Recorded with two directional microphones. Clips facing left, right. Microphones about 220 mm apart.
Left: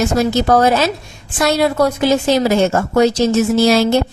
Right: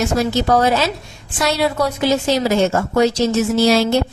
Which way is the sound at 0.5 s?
50° left (ahead or behind).